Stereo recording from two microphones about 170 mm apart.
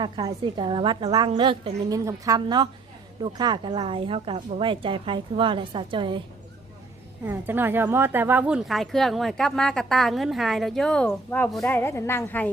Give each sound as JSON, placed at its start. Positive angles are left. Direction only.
{"t": 0.0, "sound": "speech", "side_deg": -25}
{"t": 7.3, "sound": "speech", "side_deg": -10}